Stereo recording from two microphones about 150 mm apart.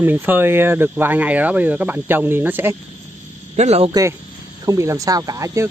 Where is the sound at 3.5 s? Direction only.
45° right (ahead or behind).